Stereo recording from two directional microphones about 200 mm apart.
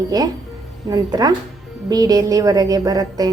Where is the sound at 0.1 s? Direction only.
20° right (ahead or behind).